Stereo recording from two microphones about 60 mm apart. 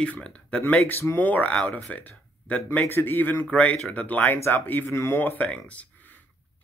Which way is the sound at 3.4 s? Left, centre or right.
Left.